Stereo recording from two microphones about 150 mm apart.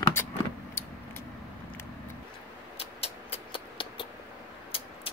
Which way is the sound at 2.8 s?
40° left (ahead or behind).